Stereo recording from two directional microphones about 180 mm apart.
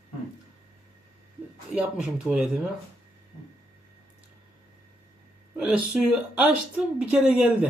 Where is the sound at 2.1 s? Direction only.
5° right (ahead or behind).